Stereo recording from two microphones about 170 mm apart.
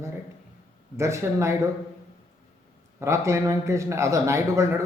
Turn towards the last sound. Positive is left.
turn(degrees=-15)  # may be behind; listen again after turning